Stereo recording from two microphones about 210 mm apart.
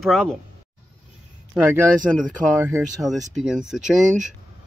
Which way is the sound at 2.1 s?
Centre (ahead or behind).